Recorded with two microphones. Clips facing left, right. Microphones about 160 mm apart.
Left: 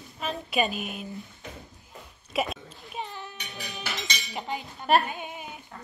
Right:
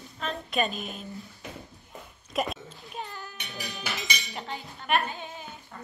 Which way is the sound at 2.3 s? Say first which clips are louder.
Left 1 dB; centre (ahead or behind).